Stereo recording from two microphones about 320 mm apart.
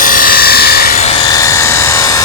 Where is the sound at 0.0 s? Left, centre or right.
Left.